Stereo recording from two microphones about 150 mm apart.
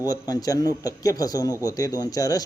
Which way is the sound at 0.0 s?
25° left (ahead or behind).